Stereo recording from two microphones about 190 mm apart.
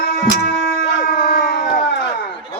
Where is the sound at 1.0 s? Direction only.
55° left (ahead or behind).